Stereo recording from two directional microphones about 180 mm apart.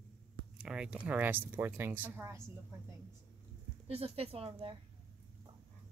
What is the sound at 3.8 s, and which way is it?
Speech, 35° right (ahead or behind).